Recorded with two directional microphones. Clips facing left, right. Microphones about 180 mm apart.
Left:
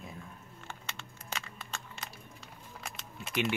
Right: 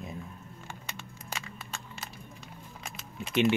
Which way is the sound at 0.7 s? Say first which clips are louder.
Even; 10° right (ahead or behind).